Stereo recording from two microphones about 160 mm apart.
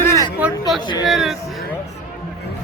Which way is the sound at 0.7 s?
Centre (ahead or behind).